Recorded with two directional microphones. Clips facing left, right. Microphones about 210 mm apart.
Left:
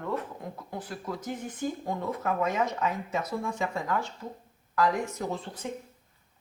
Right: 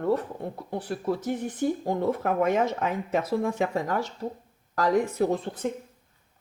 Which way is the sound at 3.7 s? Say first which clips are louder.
Right 3 dB; 40° right (ahead or behind).